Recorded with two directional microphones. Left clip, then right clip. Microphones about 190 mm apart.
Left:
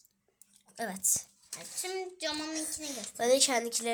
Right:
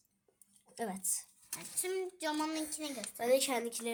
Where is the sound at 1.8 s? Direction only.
20° right (ahead or behind).